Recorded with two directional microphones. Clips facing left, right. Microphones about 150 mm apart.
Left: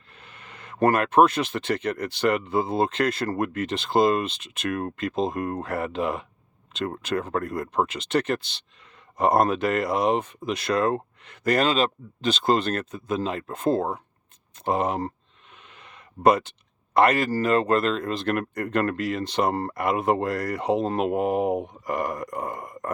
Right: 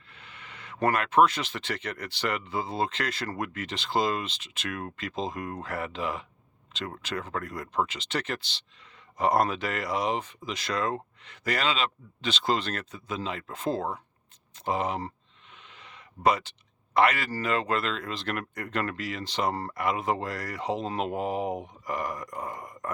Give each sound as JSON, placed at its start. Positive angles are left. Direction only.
{"t": 0.1, "sound": "speech", "side_deg": 50}
{"t": 15.5, "sound": "a sound", "side_deg": 55}
{"t": 16.9, "sound": "speech", "side_deg": 50}